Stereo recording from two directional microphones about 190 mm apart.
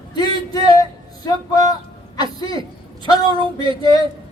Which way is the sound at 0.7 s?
20° left (ahead or behind).